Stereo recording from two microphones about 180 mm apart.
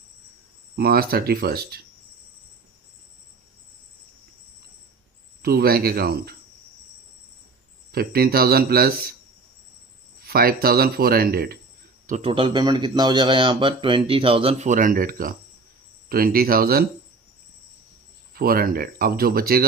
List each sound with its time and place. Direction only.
0.8 s speech: 60° right (ahead or behind)
5.4 s speech: 60° right (ahead or behind)
7.9 s speech: 55° right (ahead or behind)
10.2 s speech: 55° right (ahead or behind)
12.0 s speech: 35° right (ahead or behind)
14.7 s speech: 50° right (ahead or behind)
18.3 s speech: 55° right (ahead or behind)